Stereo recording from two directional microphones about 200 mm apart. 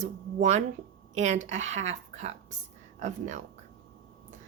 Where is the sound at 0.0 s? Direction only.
35° right (ahead or behind).